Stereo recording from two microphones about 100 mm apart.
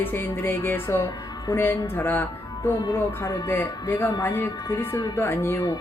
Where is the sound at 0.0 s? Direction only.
20° left (ahead or behind).